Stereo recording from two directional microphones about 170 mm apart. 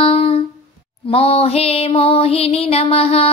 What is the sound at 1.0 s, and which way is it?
A woman's voice, 35° left (ahead or behind).